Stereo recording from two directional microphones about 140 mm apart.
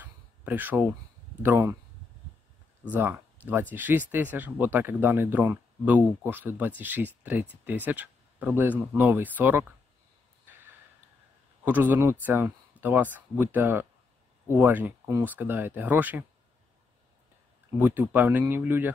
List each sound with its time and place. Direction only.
0.0 s a sound: 10° right (ahead or behind)
1.4 s speech: 15° right (ahead or behind)
2.9 s speech: 15° right (ahead or behind)
11.6 s speech: 10° right (ahead or behind)
17.7 s speech: 15° right (ahead or behind)